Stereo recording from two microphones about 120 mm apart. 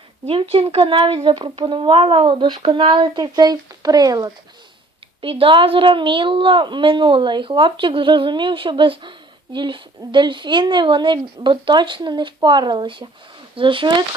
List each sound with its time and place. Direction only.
0.3 s a woman's voice: 50° right (ahead or behind); by 4.3 s 30° right (ahead or behind)
5.2 s a woman's voice: 50° right (ahead or behind)